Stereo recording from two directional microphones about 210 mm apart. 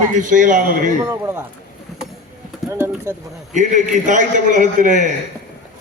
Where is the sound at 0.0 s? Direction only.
35° right (ahead or behind).